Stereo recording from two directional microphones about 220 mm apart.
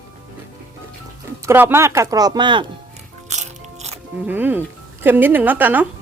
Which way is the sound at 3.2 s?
30° right (ahead or behind).